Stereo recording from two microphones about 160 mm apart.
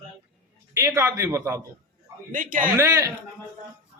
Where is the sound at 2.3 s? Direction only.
55° right (ahead or behind).